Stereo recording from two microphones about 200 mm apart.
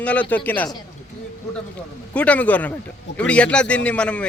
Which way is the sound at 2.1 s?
5° left (ahead or behind).